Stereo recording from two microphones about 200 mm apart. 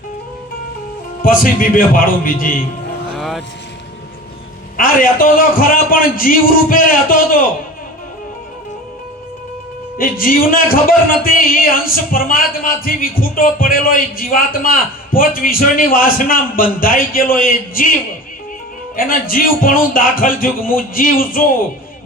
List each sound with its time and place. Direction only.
1.2 s a man's voice: 45° left (ahead or behind)
3.1 s vehicle: centre (ahead or behind)
4.8 s a man's voice: 45° left (ahead or behind)
10.0 s a man's voice: 45° left (ahead or behind)
18.9 s a man's voice: 45° left (ahead or behind)